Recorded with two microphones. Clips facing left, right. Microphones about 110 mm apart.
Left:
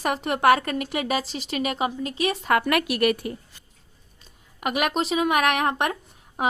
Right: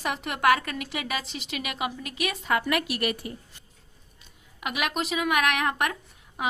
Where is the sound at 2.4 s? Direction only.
55° left (ahead or behind).